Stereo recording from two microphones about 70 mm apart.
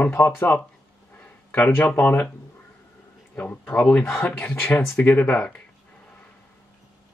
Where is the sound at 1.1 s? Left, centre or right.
Left.